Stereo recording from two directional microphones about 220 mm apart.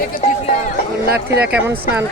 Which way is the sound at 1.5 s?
10° right (ahead or behind).